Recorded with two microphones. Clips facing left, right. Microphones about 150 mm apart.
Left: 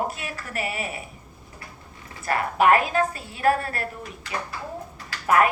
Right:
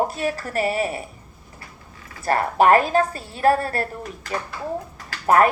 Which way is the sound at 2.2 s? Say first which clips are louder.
Right 3 dB; 40° right (ahead or behind).